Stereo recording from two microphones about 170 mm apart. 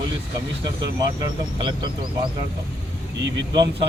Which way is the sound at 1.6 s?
25° right (ahead or behind).